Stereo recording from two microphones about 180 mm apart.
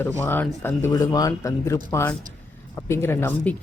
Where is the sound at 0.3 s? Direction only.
10° left (ahead or behind).